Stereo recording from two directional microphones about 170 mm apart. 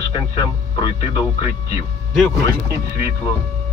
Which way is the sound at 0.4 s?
25° left (ahead or behind).